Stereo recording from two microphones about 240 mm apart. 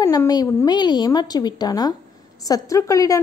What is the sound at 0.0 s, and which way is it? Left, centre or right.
A woman's voice, centre.